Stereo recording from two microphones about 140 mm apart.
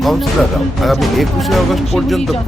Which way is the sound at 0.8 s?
Centre (ahead or behind).